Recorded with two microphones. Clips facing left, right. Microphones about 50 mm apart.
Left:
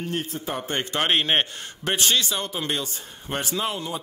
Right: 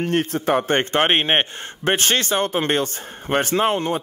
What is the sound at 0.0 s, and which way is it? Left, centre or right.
A man's voice, right.